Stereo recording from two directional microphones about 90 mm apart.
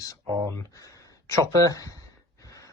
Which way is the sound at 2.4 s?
40° left (ahead or behind).